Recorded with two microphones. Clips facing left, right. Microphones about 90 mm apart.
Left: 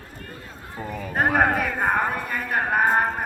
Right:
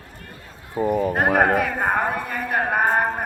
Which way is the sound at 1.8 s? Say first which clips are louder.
Right 1 dB; 5° right (ahead or behind).